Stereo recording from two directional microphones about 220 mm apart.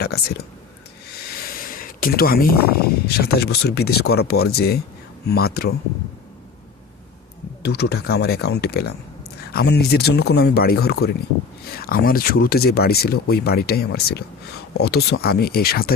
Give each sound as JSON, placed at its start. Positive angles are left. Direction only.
{"t": 0.0, "sound": "speech", "side_deg": 45}
{"t": 7.6, "sound": "speech", "side_deg": 45}